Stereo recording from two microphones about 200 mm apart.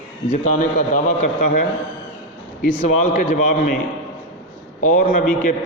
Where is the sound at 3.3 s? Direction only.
45° left (ahead or behind).